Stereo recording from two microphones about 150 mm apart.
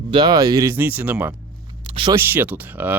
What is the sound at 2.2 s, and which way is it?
Speech, 15° right (ahead or behind).